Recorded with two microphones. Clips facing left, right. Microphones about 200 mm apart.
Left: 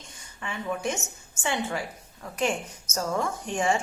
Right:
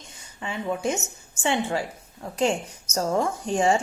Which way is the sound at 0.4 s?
25° right (ahead or behind).